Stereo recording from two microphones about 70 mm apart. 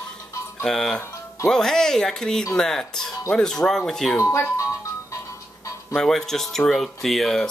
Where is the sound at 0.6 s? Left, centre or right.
Centre.